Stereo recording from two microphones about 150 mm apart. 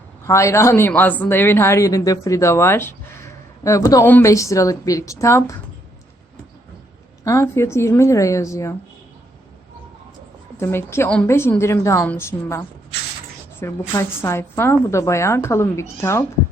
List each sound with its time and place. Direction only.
0.3 s a woman's voice: 20° left (ahead or behind)
7.3 s a woman's voice: 20° left (ahead or behind)
10.6 s a woman's voice: 15° left (ahead or behind)